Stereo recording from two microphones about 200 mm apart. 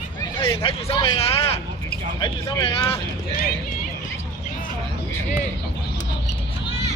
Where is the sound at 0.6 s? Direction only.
30° left (ahead or behind).